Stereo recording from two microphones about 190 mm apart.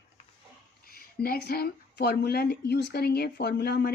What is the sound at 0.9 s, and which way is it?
Speech, 55° left (ahead or behind).